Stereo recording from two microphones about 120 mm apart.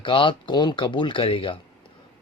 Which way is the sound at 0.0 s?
45° left (ahead or behind).